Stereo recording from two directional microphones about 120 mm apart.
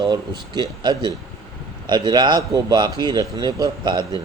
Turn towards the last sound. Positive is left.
turn(degrees=-40)  # may be behind; listen again after turning